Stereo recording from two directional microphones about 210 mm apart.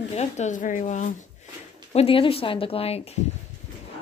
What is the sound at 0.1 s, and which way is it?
Speech, 35° left (ahead or behind).